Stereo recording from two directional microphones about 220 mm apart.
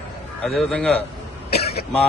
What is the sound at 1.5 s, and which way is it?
Throat clearing, 45° left (ahead or behind).